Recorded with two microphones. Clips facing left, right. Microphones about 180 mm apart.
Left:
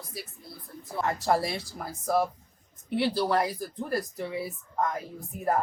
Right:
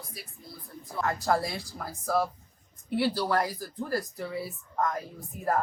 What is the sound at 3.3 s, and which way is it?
Speech, 25° left (ahead or behind).